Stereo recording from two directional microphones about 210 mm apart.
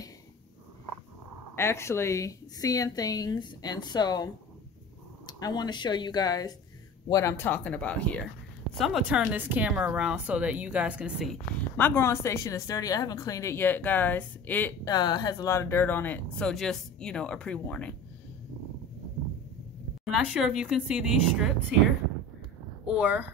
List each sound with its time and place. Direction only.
1.5 s a woman's voice: 10° left (ahead or behind); by 11.3 s 5° right (ahead or behind)
11.7 s speech: 10° left (ahead or behind)
14.9 s speech: 20° left (ahead or behind)
20.1 s a woman's voice: 5° right (ahead or behind)
22.9 s a woman's voice: 5° right (ahead or behind)